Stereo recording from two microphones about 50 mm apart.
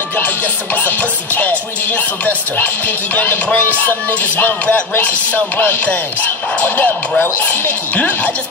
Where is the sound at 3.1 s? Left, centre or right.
Left.